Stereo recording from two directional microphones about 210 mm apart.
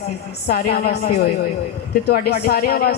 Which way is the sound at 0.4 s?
50° left (ahead or behind).